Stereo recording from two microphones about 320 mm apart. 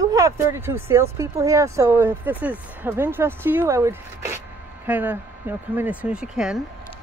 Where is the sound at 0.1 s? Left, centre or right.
Centre.